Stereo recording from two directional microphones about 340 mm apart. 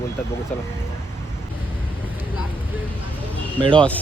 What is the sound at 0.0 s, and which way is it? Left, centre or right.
Speech, centre.